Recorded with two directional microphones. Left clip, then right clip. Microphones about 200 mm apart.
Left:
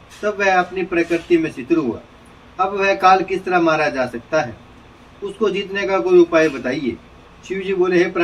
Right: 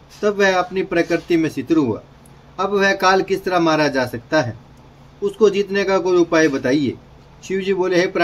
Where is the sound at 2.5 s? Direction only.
60° right (ahead or behind).